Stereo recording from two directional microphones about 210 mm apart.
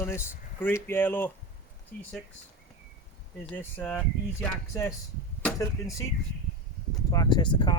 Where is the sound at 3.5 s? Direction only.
5° left (ahead or behind).